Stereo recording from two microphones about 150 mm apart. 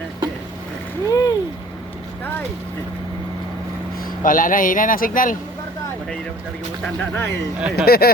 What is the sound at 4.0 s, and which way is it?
Speech, 70° left (ahead or behind).